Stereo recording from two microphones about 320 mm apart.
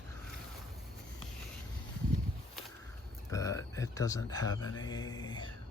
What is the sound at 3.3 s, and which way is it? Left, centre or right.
Speech, centre.